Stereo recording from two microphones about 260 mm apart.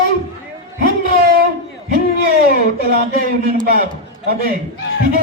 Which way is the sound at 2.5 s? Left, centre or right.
Right.